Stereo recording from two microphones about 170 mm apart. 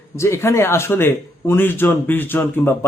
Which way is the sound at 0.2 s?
15° left (ahead or behind).